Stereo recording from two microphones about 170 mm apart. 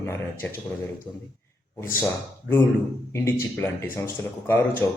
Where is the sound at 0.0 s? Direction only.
15° left (ahead or behind).